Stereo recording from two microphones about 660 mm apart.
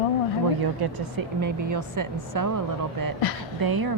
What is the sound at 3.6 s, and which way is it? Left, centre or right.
Dishes, right.